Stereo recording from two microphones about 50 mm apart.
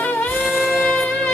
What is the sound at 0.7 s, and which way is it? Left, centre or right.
Music, left.